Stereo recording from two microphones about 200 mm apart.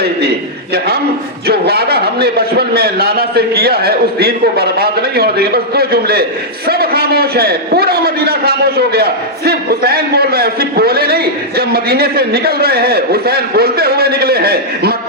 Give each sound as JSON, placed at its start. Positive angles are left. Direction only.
{"t": 1.5, "sound": "a man's voice", "side_deg": -50}